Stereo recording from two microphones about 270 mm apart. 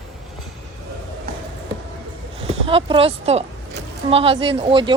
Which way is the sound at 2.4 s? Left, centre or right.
Right.